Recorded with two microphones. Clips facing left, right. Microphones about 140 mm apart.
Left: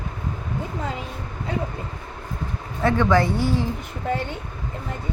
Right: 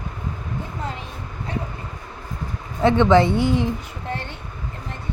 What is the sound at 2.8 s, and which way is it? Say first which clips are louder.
Speech: right 4 dB; 20° right (ahead or behind).